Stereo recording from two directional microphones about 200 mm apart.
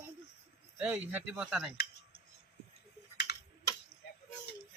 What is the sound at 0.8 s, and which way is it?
Speech, 10° right (ahead or behind).